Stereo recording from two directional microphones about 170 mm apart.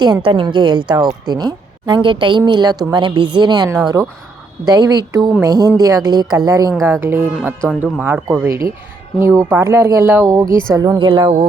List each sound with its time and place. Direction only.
0.0 s speech: 30° right (ahead or behind)